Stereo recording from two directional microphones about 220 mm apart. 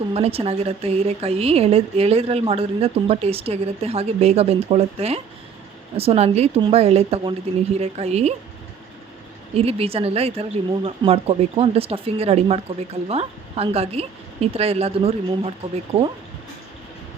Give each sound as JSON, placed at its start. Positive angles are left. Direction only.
{"t": 0.1, "sound": "speech", "side_deg": -25}
{"t": 9.6, "sound": "speech", "side_deg": -25}